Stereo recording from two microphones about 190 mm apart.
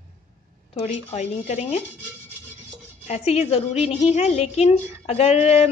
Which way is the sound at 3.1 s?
30° left (ahead or behind).